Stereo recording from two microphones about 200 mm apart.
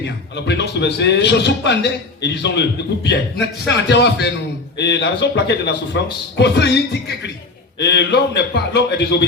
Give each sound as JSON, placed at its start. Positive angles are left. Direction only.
{"t": 0.3, "sound": "a man's voice", "side_deg": 60}